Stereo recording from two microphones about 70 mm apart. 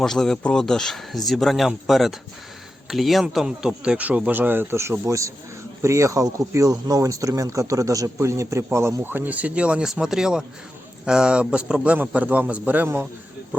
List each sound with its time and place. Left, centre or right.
0.0 s speech: centre
3.9 s speech: right
9.0 s speech: right
9.8 s speech: centre; by 13.1 s right